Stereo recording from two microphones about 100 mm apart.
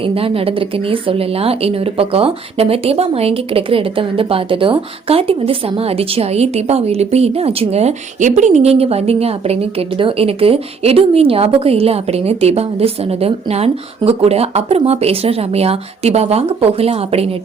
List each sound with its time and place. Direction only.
0.0 s a woman's voice: 65° right (ahead or behind)